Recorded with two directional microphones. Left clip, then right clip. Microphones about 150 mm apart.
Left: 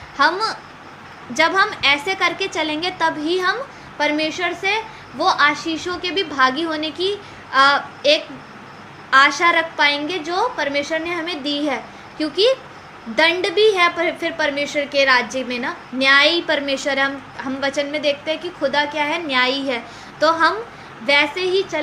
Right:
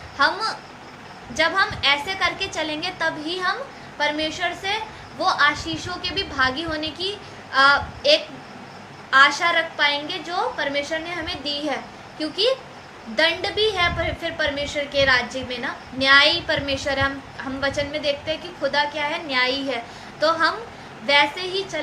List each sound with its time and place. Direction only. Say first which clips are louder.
0.2 s a woman's voice: left 3 dB; 55° left (ahead or behind)